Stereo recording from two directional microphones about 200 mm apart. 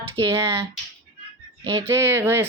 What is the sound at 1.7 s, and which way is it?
Speech, 15° right (ahead or behind).